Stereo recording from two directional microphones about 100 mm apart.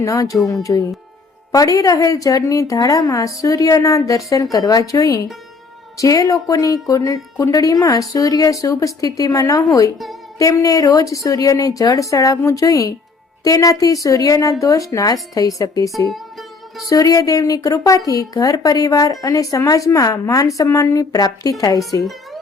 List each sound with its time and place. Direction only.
0.0 s speech: 35° left (ahead or behind)
16.0 s music: centre (ahead or behind)
16.9 s speech: 35° left (ahead or behind)